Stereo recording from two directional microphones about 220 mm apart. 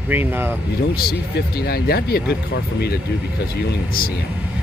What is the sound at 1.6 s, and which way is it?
Speech, 45° left (ahead or behind).